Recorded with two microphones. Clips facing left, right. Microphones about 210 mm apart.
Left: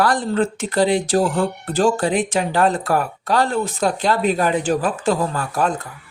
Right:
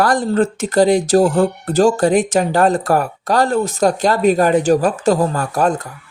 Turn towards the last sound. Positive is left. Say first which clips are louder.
# right 4 dB
turn(degrees=-40)  # may be behind; listen again after turning